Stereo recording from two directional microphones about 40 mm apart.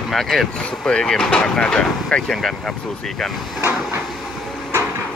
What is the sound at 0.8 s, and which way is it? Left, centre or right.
Speech, centre.